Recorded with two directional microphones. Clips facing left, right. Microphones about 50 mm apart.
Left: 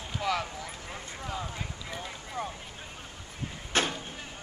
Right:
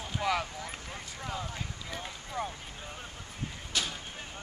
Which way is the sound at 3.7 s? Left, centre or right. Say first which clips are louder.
Left 6 dB; left.